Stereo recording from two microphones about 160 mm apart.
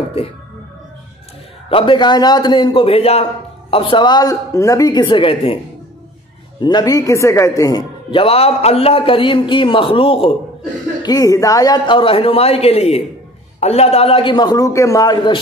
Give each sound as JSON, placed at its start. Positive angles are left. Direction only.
{"t": 1.7, "sound": "a man's voice", "side_deg": 35}
{"t": 6.6, "sound": "a woman's voice", "side_deg": 25}
{"t": 8.1, "sound": "a man's voice", "side_deg": 35}
{"t": 11.0, "sound": "a man's voice", "side_deg": 25}